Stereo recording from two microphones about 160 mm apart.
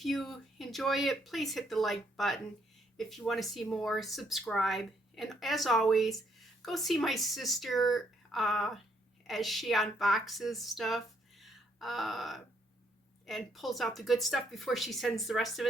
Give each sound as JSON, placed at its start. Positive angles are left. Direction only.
{"t": 0.0, "sound": "speech", "side_deg": 0}